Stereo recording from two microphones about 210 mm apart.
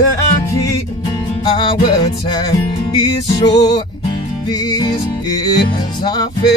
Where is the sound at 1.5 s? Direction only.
20° left (ahead or behind).